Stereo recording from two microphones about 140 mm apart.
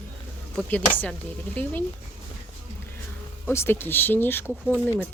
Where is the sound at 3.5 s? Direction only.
15° left (ahead or behind).